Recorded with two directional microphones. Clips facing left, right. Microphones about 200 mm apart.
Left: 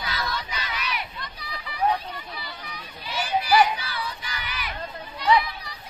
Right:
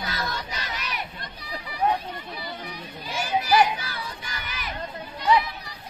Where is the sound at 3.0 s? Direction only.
45° right (ahead or behind).